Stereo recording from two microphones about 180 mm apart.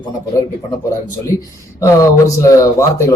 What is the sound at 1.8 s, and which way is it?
Speech, 15° left (ahead or behind).